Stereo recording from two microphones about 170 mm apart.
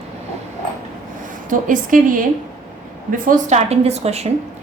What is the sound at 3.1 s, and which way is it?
A woman's voice, 45° right (ahead or behind).